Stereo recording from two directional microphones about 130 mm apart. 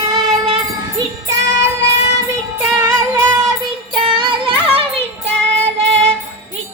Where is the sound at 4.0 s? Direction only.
40° right (ahead or behind).